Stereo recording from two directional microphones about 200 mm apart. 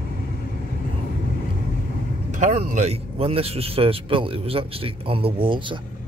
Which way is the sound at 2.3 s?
35° right (ahead or behind).